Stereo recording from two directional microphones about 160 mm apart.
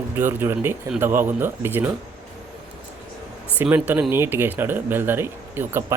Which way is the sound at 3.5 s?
10° right (ahead or behind).